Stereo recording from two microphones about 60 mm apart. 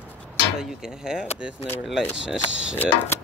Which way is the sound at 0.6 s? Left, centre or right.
Centre.